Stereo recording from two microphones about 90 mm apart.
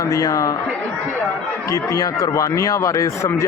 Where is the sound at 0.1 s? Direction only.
40° left (ahead or behind).